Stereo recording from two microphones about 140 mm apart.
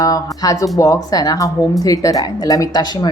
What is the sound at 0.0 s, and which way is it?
Speech, 25° left (ahead or behind).